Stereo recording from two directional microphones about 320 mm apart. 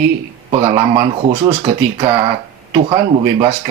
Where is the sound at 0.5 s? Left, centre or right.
Centre.